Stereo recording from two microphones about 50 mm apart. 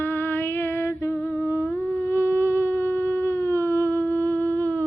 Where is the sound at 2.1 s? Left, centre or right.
Left.